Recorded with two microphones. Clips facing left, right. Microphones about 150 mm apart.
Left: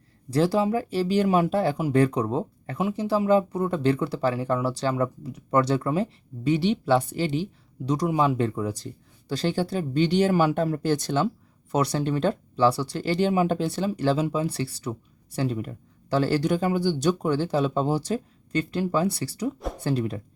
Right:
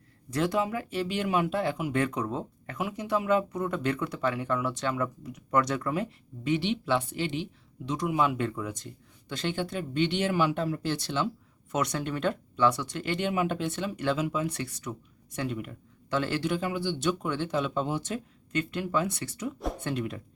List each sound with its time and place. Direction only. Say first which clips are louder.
0.3 s speech: left 6 dB; 30° left (ahead or behind)
11.7 s speech: left 6 dB; 30° left (ahead or behind)